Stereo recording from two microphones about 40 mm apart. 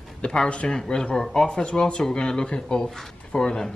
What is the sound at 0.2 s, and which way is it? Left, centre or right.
Speech, left.